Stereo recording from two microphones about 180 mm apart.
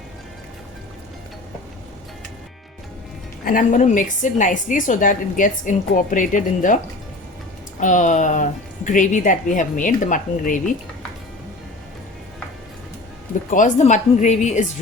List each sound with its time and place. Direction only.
3.4 s a woman's voice: 50° left (ahead or behind)
7.8 s a woman's voice: 45° left (ahead or behind)
13.5 s a woman's voice: 45° left (ahead or behind)